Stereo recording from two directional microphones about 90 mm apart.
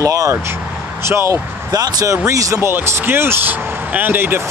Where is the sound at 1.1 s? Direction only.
30° right (ahead or behind).